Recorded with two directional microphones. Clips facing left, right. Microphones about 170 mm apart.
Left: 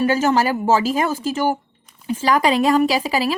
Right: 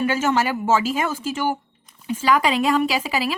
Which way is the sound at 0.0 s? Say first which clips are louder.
Left 3 dB; 35° left (ahead or behind).